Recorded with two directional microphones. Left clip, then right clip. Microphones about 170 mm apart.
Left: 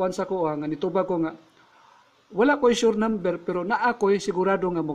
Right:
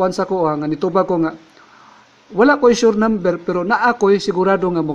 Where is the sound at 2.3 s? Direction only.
Centre (ahead or behind).